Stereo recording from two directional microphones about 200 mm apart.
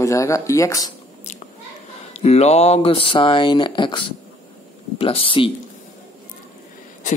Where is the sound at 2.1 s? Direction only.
30° left (ahead or behind).